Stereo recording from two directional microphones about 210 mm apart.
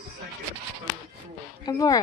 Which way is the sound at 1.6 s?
15° left (ahead or behind).